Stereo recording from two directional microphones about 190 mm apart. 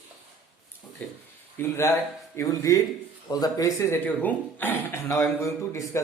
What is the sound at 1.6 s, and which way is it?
Speech, 10° left (ahead or behind).